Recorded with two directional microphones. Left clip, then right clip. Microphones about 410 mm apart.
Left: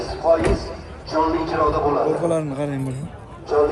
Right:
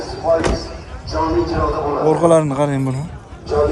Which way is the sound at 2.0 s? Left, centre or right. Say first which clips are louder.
Right 8 dB; centre.